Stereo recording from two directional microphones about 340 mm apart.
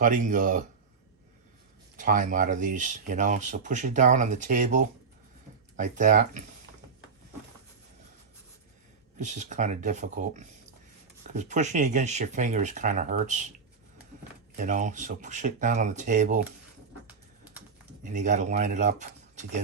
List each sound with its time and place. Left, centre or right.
0.0 s speech: right
2.0 s speech: right
9.1 s speech: right
14.5 s speech: right
18.0 s speech: right